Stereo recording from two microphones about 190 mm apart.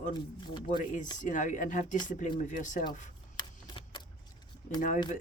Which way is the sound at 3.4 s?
25° left (ahead or behind).